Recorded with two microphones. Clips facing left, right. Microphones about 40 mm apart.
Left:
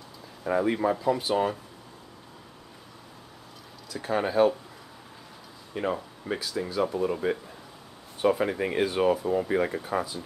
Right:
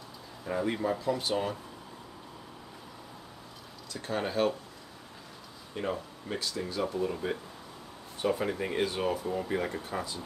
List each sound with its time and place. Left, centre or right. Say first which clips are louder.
0.5 s speech: left 6 dB; left
0.9 s speech: left 5 dB; centre
3.9 s speech: left 6 dB; centre
5.8 s speech: left 4 dB; centre